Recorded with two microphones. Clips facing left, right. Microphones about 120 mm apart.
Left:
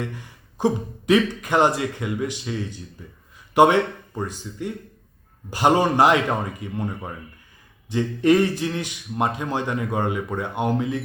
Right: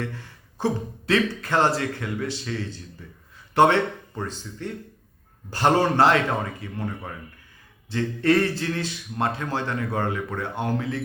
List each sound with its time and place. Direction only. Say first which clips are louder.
0.0 s speech: left 1 dB; 15° left (ahead or behind)